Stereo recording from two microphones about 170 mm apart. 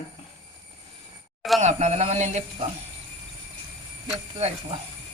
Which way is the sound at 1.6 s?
40° right (ahead or behind).